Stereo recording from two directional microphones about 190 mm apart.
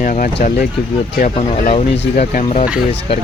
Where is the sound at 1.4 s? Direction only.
30° left (ahead or behind).